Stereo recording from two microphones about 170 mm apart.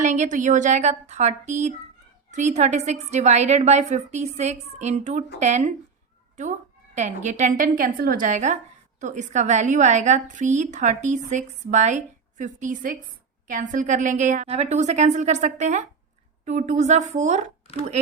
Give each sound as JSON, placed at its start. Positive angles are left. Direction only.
{"t": 0.0, "sound": "a woman's voice", "side_deg": -45}